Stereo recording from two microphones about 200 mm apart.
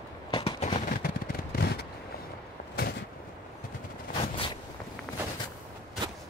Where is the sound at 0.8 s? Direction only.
50° left (ahead or behind).